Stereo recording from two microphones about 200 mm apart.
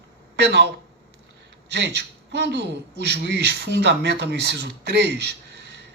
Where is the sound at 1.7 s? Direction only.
60° right (ahead or behind).